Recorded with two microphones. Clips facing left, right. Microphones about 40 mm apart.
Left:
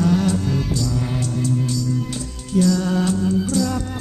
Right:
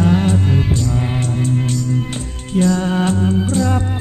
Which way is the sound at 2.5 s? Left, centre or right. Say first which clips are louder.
Right 2 dB; right.